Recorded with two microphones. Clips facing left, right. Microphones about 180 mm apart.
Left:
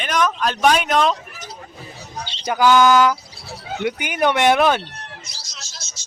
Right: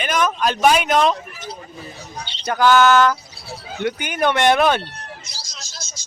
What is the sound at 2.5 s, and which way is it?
Speech, 10° left (ahead or behind).